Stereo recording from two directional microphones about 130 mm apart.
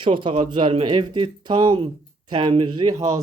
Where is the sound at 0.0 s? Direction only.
40° right (ahead or behind).